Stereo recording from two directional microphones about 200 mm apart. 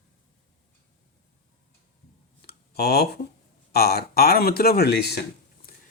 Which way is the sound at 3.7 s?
50° left (ahead or behind).